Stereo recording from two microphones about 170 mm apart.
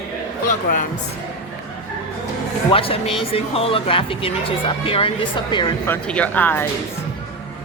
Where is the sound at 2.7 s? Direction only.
35° left (ahead or behind).